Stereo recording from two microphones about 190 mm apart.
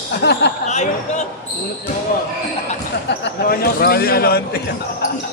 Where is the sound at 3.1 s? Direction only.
55° left (ahead or behind).